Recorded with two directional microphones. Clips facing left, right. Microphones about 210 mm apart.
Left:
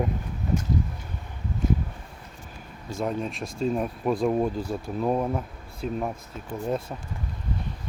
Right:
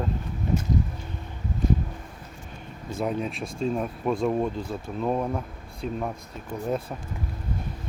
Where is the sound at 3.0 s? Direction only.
Centre (ahead or behind).